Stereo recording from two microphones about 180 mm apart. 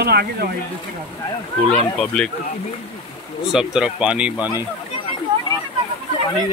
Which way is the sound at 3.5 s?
5° right (ahead or behind).